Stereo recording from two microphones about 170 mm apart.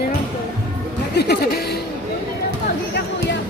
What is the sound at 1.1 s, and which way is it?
Speech, 70° left (ahead or behind).